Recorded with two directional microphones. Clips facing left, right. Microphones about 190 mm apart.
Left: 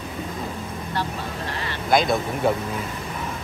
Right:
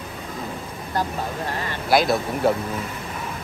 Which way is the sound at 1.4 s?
45° right (ahead or behind).